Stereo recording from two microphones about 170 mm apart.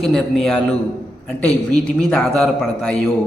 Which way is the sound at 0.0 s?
Centre (ahead or behind).